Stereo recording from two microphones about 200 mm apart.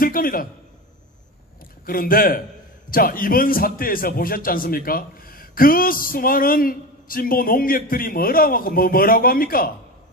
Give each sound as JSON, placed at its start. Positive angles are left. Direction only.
{"t": 0.0, "sound": "a man's voice", "side_deg": 45}
{"t": 1.9, "sound": "a man's voice", "side_deg": 45}